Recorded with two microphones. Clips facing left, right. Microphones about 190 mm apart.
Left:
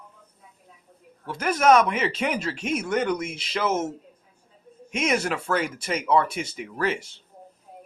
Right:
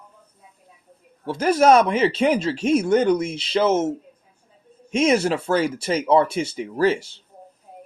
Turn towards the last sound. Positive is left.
turn(degrees=-30)  # may be behind; listen again after turning